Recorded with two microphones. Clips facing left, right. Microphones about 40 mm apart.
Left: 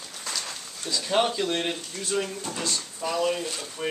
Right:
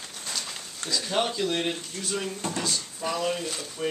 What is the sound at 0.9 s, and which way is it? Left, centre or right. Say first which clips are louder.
Speech: left 3 dB; centre.